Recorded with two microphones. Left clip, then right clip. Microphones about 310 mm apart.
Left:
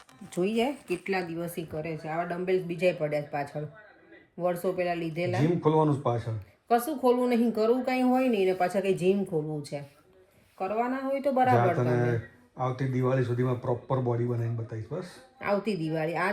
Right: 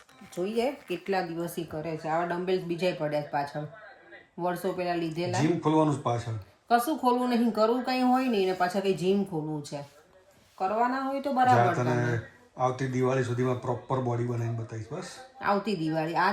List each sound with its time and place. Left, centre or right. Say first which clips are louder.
0.4 s speech: left 1 dB; left
1.1 s speech: right 4 dB; centre